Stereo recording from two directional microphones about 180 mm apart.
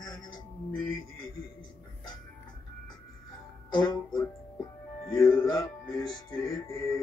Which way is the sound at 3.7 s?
25° left (ahead or behind).